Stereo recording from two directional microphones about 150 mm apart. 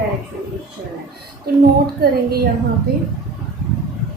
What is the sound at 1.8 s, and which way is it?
Speech, 90° right.